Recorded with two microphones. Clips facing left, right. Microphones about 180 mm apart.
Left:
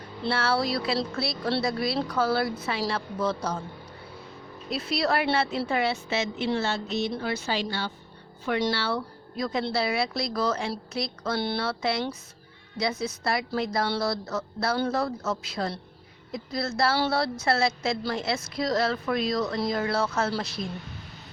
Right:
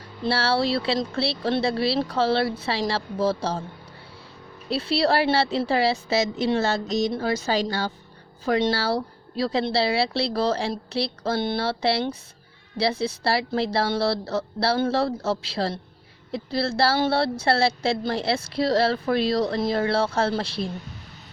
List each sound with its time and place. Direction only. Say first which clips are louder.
0.3 s speech: right 3 dB; 30° right (ahead or behind)
4.7 s speech: right 5 dB; 30° right (ahead or behind)